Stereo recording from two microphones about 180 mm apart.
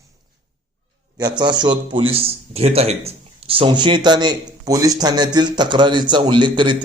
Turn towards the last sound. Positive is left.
turn(degrees=-25)  # may be behind; listen again after turning